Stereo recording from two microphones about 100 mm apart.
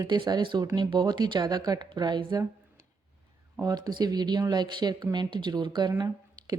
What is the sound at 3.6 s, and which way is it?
A woman's voice, 40° right (ahead or behind).